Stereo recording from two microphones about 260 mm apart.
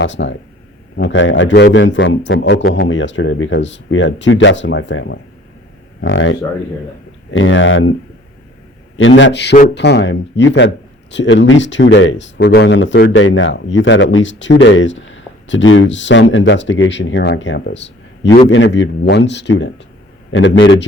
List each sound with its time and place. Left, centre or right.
0.0 s speech: left
7.3 s speech: left
9.0 s speech: left